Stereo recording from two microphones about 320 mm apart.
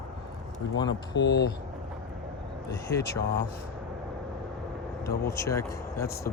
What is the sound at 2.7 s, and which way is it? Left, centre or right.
Speech, centre.